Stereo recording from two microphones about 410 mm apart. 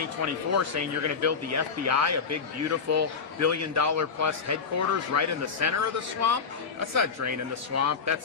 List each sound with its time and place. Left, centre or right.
0.5 s a man's voice: right